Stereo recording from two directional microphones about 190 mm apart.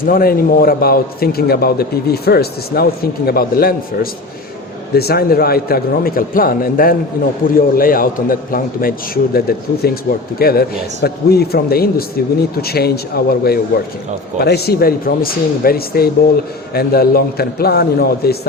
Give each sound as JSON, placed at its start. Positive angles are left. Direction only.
{"t": 0.0, "sound": "a man's voice", "side_deg": 50}